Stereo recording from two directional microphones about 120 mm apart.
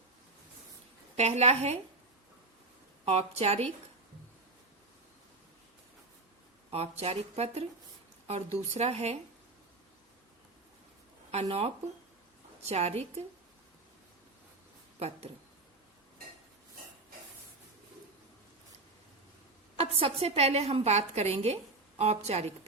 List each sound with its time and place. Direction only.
1.1 s a woman's voice: 65° right (ahead or behind)
3.1 s a woman's voice: 60° right (ahead or behind)
6.7 s a woman's voice: 60° right (ahead or behind)
11.3 s a woman's voice: 65° right (ahead or behind)
14.9 s speech: 60° right (ahead or behind)
19.7 s a woman's voice: 55° right (ahead or behind)